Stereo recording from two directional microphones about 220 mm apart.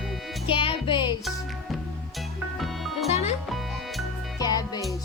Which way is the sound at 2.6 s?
Centre (ahead or behind).